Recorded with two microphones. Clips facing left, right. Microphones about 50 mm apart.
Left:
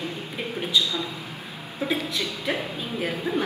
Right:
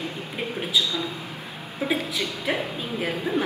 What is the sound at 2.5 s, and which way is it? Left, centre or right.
Speech, right.